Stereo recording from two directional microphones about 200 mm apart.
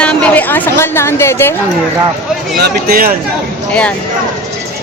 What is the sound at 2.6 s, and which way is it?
Speech, 45° right (ahead or behind).